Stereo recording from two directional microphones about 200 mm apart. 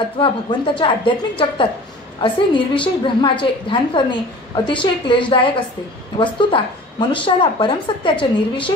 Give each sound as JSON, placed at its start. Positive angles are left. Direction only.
{"t": 0.2, "sound": "a woman's voice", "side_deg": 25}
{"t": 2.2, "sound": "a woman's voice", "side_deg": 25}